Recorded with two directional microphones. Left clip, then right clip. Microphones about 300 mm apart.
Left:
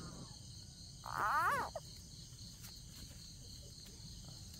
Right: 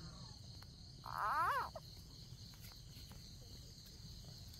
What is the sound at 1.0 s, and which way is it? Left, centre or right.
Frog, centre.